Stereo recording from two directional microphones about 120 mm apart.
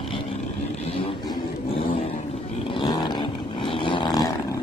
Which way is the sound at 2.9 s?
45° left (ahead or behind).